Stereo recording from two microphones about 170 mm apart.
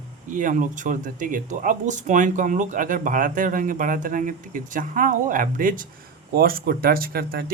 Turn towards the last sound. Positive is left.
turn(degrees=-60)  # may be behind; listen again after turning